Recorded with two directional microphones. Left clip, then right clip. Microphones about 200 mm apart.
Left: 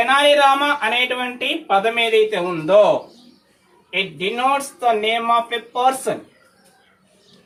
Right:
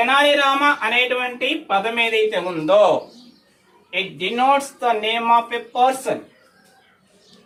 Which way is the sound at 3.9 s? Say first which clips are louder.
Left 1 dB; 15° right (ahead or behind).